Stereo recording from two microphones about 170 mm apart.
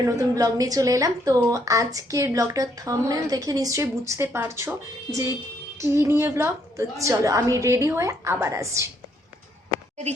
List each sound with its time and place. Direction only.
0.0 s a woman's voice: 20° right (ahead or behind)
5.8 s a woman's voice: 15° right (ahead or behind)